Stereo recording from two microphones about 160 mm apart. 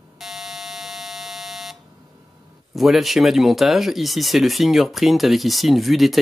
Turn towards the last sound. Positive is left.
turn(degrees=0)  # may be behind; listen again after turning